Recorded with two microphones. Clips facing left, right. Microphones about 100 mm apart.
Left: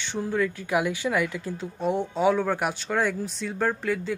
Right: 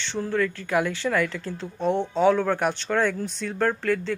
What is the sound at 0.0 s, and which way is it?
Speech, 15° left (ahead or behind).